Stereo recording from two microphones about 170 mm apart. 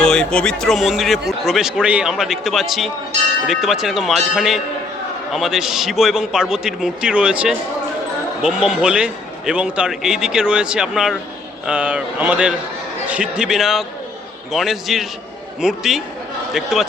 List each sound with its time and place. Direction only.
0.0 s a man's voice: 5° left (ahead or behind)